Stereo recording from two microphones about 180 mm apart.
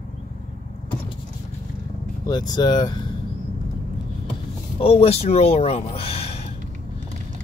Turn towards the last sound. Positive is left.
turn(degrees=35)  # may be behind; listen again after turning